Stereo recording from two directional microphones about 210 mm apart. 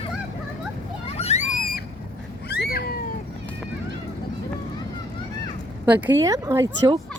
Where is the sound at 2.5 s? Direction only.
50° left (ahead or behind).